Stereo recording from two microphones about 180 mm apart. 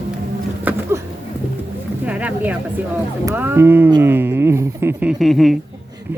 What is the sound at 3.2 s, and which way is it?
Speech, 10° right (ahead or behind).